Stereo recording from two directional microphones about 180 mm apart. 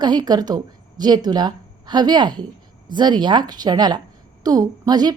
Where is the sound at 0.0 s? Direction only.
25° right (ahead or behind).